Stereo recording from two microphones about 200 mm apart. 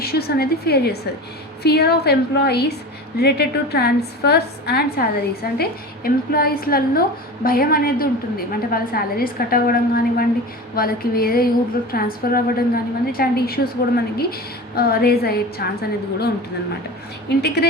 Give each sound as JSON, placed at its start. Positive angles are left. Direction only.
{"t": 0.0, "sound": "a woman's voice", "side_deg": 50}
{"t": 17.2, "sound": "a woman's voice", "side_deg": 55}